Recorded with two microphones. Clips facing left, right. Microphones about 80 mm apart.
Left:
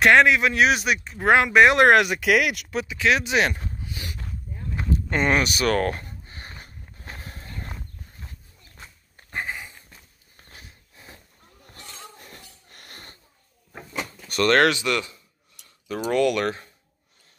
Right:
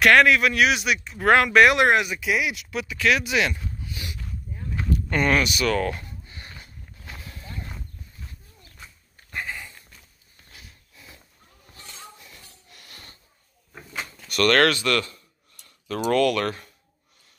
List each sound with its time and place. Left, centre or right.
0.0 s speech: left
1.1 s speech: centre
1.8 s speech: left
2.9 s speech: left
4.7 s a sound: left
5.5 s walk: left
8.7 s dog: left
10.3 s snort: left
11.6 s a sound: left
14.2 s speech: left